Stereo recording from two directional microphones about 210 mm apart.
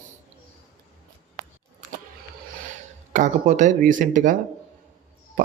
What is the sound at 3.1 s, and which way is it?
Speech, 35° right (ahead or behind).